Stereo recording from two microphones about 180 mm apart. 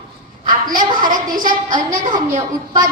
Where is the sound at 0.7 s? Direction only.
50° right (ahead or behind).